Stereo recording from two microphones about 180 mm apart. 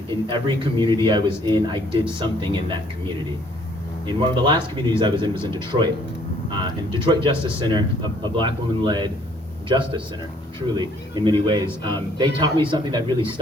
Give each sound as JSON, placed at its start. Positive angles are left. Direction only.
{"t": 0.3, "sound": "speech", "side_deg": -25}
{"t": 4.2, "sound": "speech", "side_deg": -25}
{"t": 7.0, "sound": "speech", "side_deg": -25}